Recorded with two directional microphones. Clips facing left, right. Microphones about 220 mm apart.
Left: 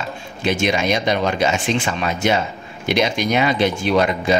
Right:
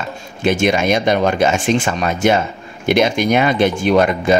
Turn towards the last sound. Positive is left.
turn(degrees=-50)  # may be behind; listen again after turning